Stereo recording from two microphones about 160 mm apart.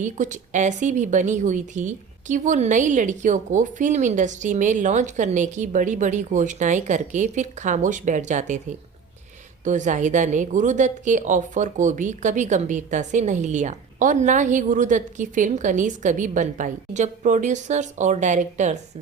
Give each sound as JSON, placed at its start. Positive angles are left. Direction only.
{"t": 0.0, "sound": "a woman's voice", "side_deg": -50}
{"t": 9.6, "sound": "a woman's voice", "side_deg": -50}